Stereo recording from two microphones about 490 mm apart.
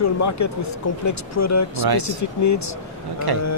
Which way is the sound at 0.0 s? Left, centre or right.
Left.